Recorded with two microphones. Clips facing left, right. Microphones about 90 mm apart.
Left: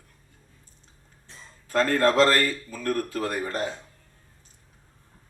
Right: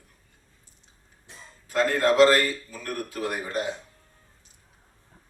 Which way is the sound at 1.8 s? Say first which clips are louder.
Right 1 dB; 15° right (ahead or behind).